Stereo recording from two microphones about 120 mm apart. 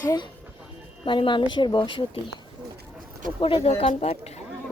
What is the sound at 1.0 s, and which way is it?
A woman's voice, 45° left (ahead or behind).